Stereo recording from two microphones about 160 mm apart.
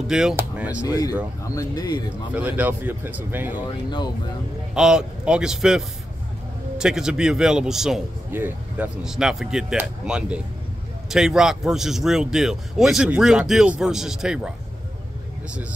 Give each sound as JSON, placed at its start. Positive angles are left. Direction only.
{"t": 0.0, "sound": "speech", "side_deg": -5}
{"t": 0.8, "sound": "speech", "side_deg": 25}
{"t": 2.3, "sound": "speech", "side_deg": -10}
{"t": 4.7, "sound": "speech", "side_deg": -5}